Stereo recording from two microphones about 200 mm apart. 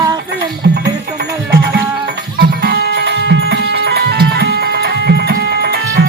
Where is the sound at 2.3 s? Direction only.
50° right (ahead or behind).